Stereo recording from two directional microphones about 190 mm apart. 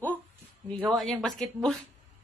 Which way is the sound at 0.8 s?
Centre (ahead or behind).